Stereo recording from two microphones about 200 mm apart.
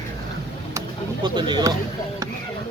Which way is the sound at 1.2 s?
20° right (ahead or behind).